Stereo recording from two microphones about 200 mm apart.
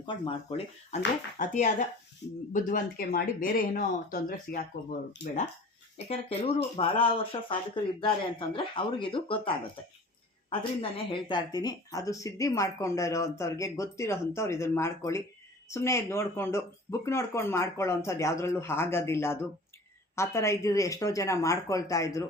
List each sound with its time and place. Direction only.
0.0 s speech: 25° left (ahead or behind); by 5.3 s 50° left (ahead or behind)
6.0 s speech: 30° left (ahead or behind)
10.8 s speech: 25° left (ahead or behind)